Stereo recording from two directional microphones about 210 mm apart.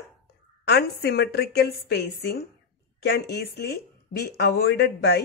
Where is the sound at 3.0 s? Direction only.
50° left (ahead or behind).